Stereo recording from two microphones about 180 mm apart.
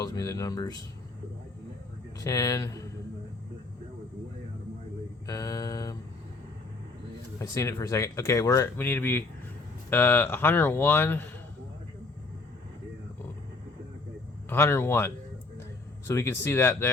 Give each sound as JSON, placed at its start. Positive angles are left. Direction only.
{"t": 0.0, "sound": "speech", "side_deg": 20}
{"t": 2.2, "sound": "speech", "side_deg": 20}
{"t": 5.2, "sound": "mantra", "side_deg": 20}
{"t": 7.3, "sound": "speech", "side_deg": 15}
{"t": 14.5, "sound": "speech", "side_deg": 10}